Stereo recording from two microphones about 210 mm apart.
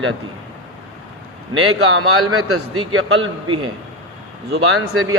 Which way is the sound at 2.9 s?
75° right (ahead or behind).